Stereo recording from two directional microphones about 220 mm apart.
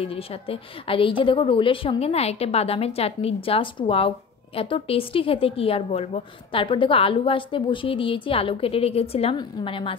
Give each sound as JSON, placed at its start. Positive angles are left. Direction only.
{"t": 0.0, "sound": "a woman's voice", "side_deg": 25}